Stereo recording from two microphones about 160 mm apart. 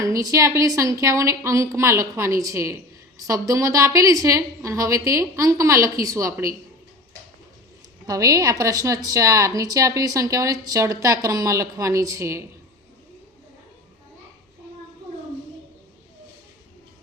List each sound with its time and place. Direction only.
0.0 s a woman's voice: 20° right (ahead or behind)
8.0 s a woman's voice: 20° right (ahead or behind)